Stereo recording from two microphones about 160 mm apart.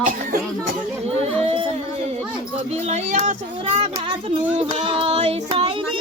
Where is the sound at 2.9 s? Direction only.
45° right (ahead or behind).